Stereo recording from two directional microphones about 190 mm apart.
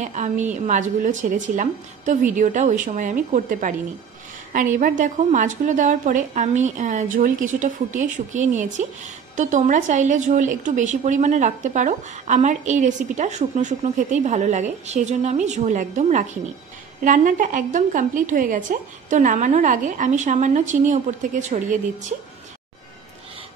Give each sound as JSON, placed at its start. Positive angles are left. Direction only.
{"t": 0.0, "sound": "a woman's voice", "side_deg": -40}